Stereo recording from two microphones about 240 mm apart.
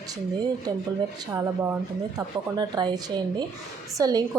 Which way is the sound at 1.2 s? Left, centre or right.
Centre.